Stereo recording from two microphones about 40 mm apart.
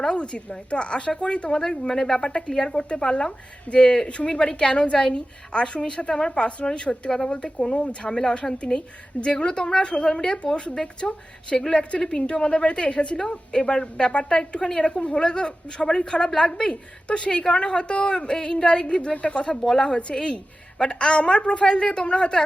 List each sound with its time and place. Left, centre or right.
0.0 s speech: left
19.6 s speech: centre